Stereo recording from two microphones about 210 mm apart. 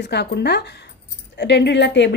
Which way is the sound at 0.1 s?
50° left (ahead or behind).